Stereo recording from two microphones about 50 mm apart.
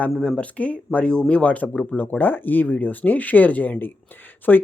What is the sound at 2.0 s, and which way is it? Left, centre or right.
Speech, left.